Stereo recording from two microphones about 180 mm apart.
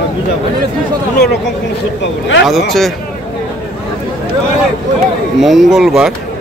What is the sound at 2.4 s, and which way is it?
Speech, centre (ahead or behind).